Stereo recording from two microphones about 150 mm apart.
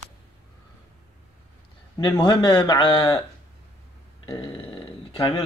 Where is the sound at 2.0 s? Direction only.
25° left (ahead or behind).